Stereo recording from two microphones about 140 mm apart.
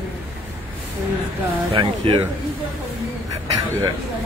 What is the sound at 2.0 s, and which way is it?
Speech, 40° right (ahead or behind).